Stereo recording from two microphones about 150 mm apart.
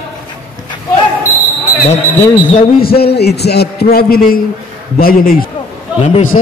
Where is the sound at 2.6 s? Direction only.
85° left.